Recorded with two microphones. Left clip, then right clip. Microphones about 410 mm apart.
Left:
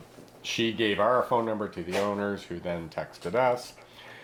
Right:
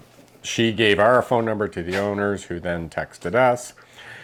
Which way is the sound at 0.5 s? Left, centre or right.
Right.